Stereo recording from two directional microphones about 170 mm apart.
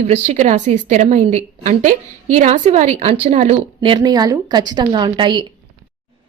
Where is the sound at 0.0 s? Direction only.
40° right (ahead or behind).